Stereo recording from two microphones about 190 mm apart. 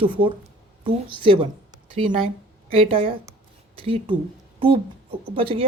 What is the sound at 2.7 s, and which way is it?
A woman's voice, 30° right (ahead or behind).